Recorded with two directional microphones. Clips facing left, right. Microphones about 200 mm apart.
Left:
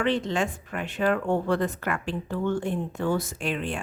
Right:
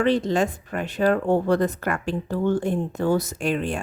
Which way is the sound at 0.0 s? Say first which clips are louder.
Right 5 dB; 35° right (ahead or behind).